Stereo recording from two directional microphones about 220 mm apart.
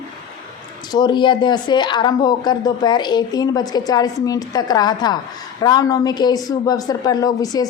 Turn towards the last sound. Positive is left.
turn(degrees=15)  # may be behind; listen again after turning